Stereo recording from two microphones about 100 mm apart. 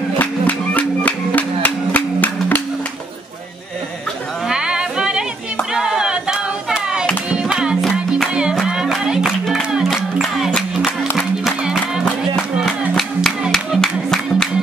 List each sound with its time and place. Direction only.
0.2 s music: 15° left (ahead or behind)
4.5 s a sound: 10° right (ahead or behind)
7.2 s music: 10° right (ahead or behind)